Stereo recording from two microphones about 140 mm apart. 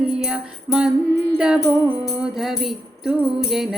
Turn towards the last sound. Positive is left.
turn(degrees=-5)  # may be behind; listen again after turning